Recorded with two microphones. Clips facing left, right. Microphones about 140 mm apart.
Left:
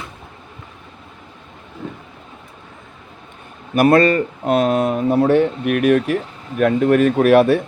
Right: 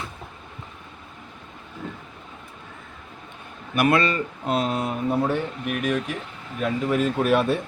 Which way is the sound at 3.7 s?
45° left (ahead or behind).